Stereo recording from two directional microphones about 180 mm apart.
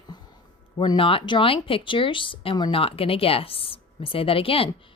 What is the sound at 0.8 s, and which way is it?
Speech, 30° left (ahead or behind).